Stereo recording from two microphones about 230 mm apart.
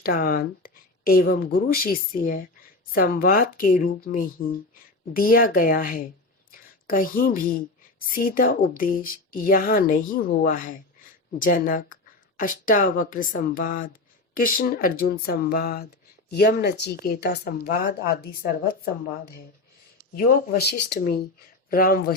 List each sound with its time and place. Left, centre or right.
0.0 s speech: left
6.5 s a sound: left
8.1 s speech: left